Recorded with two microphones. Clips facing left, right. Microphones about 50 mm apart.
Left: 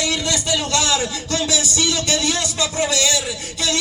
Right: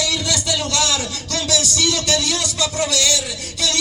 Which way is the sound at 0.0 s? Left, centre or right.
Left.